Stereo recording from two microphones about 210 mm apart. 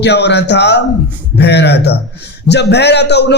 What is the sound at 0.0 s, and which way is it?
A man's voice, 55° left (ahead or behind).